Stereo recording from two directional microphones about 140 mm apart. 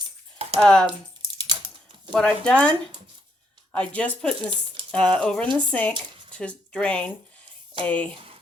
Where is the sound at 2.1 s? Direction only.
5° left (ahead or behind).